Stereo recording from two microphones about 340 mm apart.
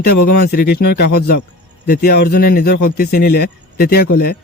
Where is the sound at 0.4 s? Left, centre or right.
Left.